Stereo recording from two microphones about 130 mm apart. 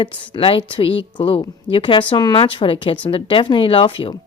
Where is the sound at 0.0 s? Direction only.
40° left (ahead or behind).